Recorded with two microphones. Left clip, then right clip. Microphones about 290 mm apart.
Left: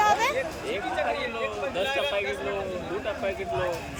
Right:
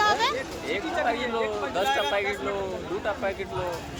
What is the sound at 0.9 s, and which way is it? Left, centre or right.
Speech, centre.